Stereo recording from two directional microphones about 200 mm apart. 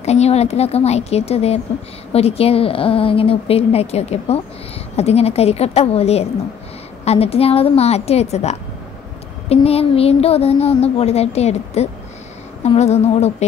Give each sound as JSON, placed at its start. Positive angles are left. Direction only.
{"t": 0.0, "sound": "a woman's voice", "side_deg": 35}